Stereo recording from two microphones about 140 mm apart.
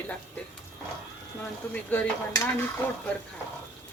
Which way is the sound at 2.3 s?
20° left (ahead or behind).